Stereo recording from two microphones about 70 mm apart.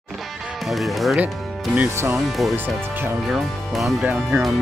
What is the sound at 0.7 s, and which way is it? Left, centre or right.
Speech, centre.